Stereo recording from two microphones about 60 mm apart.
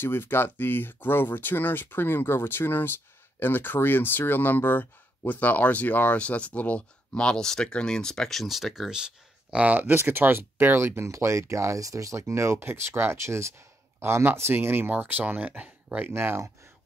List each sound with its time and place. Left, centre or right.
0.0 s speech: left; by 16.1 s right
16.1 s speech: right